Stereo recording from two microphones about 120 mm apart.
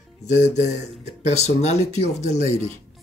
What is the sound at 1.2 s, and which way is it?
Speech, 65° left (ahead or behind).